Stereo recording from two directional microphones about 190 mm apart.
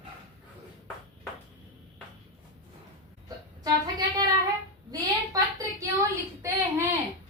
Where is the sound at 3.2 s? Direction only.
20° right (ahead or behind).